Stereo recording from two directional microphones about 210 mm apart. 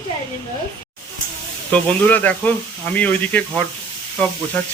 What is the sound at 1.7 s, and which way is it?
Speech, 10° left (ahead or behind).